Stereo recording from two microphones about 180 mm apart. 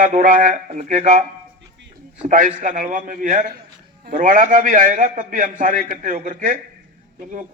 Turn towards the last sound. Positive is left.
turn(degrees=-45)  # may be behind; listen again after turning